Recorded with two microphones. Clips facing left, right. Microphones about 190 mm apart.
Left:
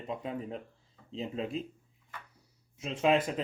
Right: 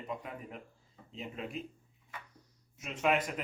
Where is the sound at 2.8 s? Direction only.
30° left (ahead or behind).